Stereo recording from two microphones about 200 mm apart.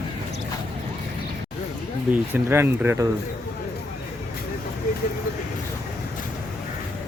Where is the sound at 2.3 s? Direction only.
10° right (ahead or behind).